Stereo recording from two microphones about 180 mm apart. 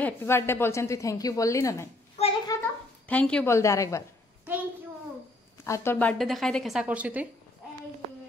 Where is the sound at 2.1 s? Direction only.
35° left (ahead or behind).